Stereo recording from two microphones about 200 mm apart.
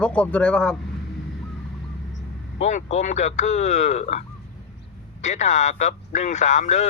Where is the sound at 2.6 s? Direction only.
35° left (ahead or behind).